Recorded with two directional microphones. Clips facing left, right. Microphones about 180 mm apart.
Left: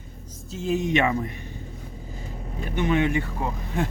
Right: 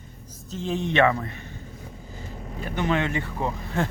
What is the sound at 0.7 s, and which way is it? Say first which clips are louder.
Speech: right 1 dB; 10° left (ahead or behind).